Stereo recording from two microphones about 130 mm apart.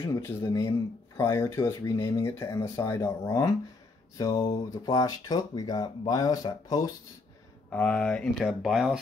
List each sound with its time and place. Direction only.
0.4 s speech: 25° left (ahead or behind)
4.2 s speech: 35° left (ahead or behind)
7.7 s speech: 10° left (ahead or behind)